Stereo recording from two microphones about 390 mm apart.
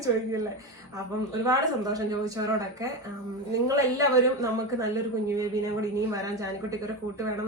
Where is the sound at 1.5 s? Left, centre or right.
Centre.